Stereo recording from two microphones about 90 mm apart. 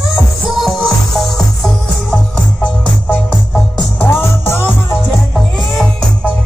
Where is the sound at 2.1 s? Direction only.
15° left (ahead or behind).